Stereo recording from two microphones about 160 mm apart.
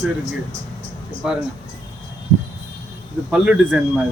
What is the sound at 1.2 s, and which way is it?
Speech, 5° right (ahead or behind).